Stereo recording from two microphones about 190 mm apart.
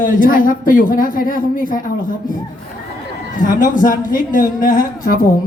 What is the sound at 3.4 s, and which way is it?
Speech, 45° left (ahead or behind).